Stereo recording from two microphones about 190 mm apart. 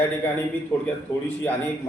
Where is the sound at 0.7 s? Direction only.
15° left (ahead or behind).